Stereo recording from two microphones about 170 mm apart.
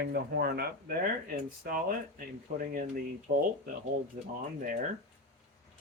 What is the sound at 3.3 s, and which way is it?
Speech, 60° right (ahead or behind).